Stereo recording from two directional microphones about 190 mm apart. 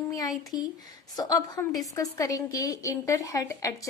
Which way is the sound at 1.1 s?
20° left (ahead or behind).